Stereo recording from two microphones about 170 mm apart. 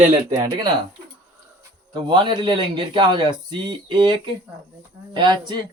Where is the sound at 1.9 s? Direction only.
25° right (ahead or behind).